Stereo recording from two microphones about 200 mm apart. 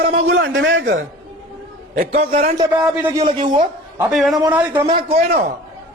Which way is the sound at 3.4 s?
20° right (ahead or behind).